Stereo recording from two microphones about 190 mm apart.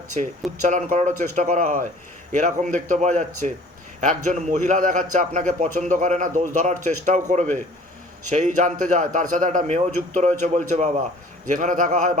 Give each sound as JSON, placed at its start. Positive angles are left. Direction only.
{"t": 0.7, "sound": "a man's voice", "side_deg": -40}